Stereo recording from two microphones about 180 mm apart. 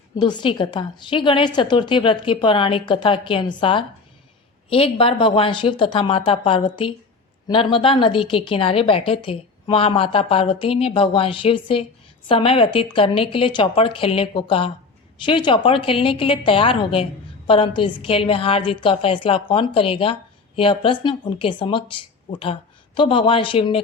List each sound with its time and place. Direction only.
0.2 s a woman's voice: 25° left (ahead or behind)